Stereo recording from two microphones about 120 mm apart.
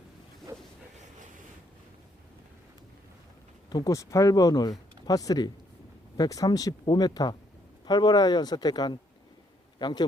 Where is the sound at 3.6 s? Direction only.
30° left (ahead or behind).